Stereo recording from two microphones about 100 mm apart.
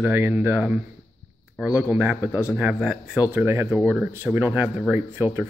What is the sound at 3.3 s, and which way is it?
Speech, 25° right (ahead or behind).